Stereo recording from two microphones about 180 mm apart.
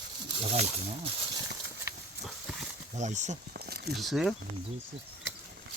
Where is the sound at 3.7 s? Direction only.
60° right (ahead or behind).